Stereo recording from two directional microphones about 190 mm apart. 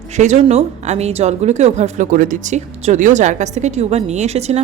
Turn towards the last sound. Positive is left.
turn(degrees=-35)  # may be behind; listen again after turning